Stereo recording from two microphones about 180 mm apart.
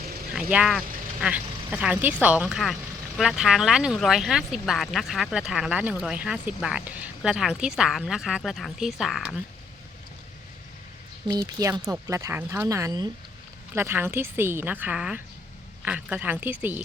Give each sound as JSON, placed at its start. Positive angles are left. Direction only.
{"t": 0.5, "sound": "speech", "side_deg": -5}
{"t": 11.6, "sound": "speech", "side_deg": -20}